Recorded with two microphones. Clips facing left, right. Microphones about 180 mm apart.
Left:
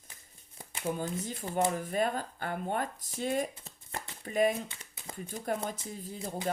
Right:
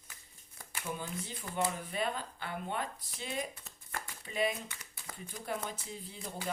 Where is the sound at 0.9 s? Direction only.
40° left (ahead or behind).